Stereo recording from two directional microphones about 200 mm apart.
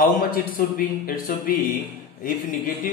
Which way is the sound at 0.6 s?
45° left (ahead or behind).